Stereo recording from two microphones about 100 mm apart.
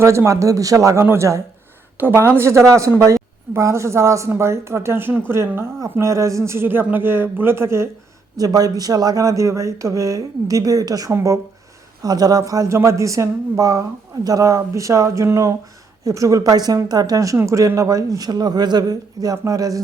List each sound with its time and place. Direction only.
0.0 s speech: 30° right (ahead or behind)
8.4 s speech: 40° right (ahead or behind)